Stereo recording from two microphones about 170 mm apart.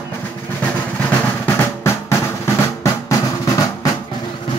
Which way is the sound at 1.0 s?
15° left (ahead or behind).